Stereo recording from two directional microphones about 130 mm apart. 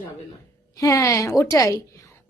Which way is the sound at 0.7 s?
25° left (ahead or behind).